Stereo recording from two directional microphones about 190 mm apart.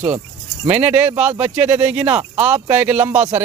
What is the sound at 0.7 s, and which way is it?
Speech, 10° right (ahead or behind).